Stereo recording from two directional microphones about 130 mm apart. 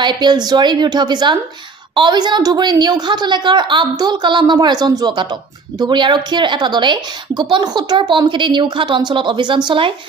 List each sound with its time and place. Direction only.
0.0 s a woman's voice: 35° right (ahead or behind)